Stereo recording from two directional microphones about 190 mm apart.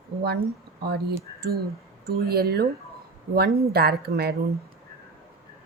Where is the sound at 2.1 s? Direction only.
55° right (ahead or behind).